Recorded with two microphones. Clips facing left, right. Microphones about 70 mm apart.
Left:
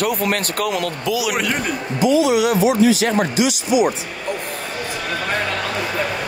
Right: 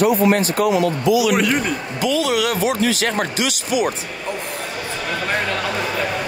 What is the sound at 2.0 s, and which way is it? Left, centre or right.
Speech, right.